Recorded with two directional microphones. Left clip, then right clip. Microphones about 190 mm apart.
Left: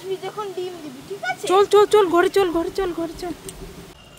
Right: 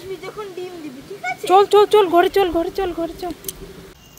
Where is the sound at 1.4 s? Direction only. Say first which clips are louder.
Right 3 dB; centre (ahead or behind).